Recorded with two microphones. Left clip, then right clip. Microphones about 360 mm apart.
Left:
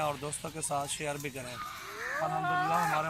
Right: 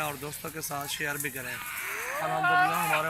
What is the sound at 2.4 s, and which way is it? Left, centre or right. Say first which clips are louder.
Speech: right 10 dB; right.